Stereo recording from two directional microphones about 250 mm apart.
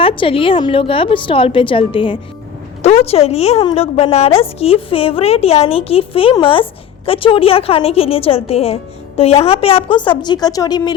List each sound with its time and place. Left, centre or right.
0.0 s a woman's voice: left